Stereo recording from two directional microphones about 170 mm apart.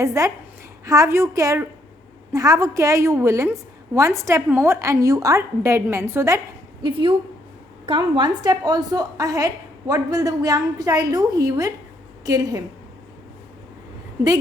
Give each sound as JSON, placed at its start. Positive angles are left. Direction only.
{"t": 0.0, "sound": "a woman's voice", "side_deg": -20}
{"t": 6.8, "sound": "a woman's voice", "side_deg": -30}